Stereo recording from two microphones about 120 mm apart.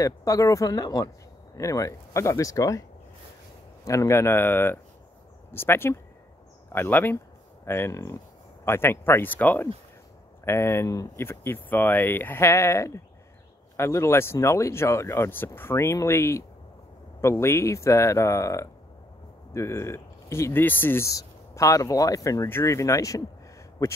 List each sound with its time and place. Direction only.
0.0 s speech: 25° left (ahead or behind)
3.8 s speech: 25° left (ahead or behind)